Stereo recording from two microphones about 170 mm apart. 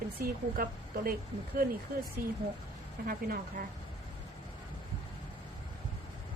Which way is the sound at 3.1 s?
60° right (ahead or behind).